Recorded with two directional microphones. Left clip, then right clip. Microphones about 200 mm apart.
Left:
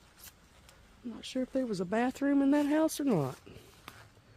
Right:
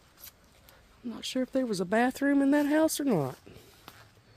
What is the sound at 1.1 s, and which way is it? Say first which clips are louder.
Speech: right 4 dB; 30° right (ahead or behind).